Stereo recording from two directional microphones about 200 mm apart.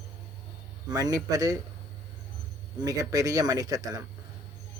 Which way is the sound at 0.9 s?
20° right (ahead or behind).